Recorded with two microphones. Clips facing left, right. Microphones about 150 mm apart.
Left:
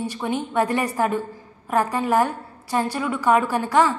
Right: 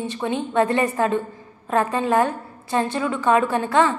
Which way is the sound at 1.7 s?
20° right (ahead or behind).